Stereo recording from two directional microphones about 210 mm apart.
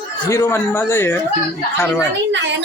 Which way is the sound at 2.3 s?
60° right (ahead or behind).